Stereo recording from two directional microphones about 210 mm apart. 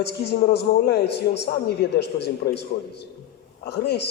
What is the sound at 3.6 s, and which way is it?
Speech, 55° left (ahead or behind).